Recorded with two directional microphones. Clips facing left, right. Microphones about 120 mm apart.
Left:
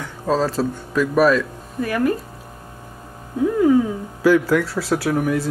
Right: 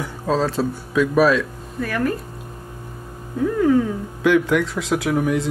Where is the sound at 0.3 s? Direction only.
Centre (ahead or behind).